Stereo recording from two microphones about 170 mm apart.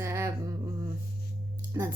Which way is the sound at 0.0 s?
15° right (ahead or behind).